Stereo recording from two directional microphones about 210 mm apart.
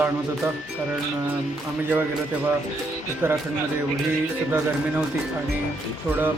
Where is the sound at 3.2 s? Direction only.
10° right (ahead or behind).